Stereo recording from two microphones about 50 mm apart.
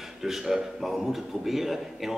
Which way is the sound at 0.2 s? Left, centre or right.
Centre.